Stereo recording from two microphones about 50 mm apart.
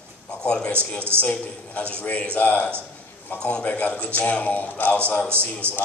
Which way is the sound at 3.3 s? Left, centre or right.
Centre.